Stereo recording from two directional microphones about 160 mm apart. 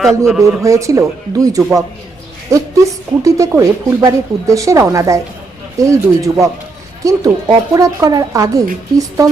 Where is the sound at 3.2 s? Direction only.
20° right (ahead or behind).